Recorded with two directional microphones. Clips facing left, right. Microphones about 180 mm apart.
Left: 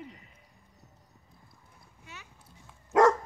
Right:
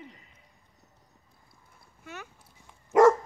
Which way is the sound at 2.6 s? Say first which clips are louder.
Right 3 dB; 10° right (ahead or behind).